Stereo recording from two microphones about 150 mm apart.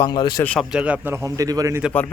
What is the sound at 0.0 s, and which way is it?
Speech, 30° left (ahead or behind).